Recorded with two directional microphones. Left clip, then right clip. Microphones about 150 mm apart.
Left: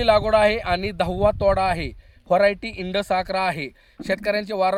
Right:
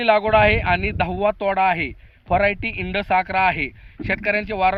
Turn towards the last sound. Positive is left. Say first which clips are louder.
# right 2 dB
turn(degrees=50)  # may be behind; listen again after turning